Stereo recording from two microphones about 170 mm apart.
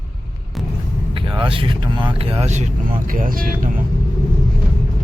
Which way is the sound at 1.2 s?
30° right (ahead or behind).